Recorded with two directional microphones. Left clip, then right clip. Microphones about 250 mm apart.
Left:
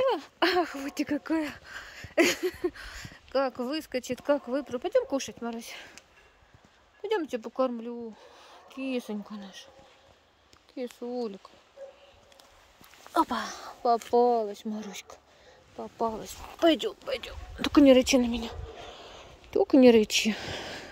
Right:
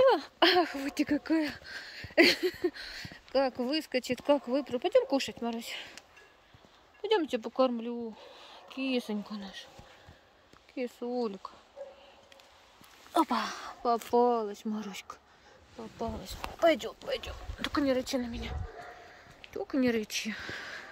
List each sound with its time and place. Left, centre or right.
0.2 s speech: centre
10.8 s speech: centre
13.1 s speech: centre
15.8 s speech: centre
17.8 s a sound: left
19.7 s speech: left